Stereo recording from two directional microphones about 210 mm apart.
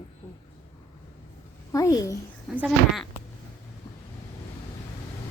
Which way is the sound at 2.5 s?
5° right (ahead or behind).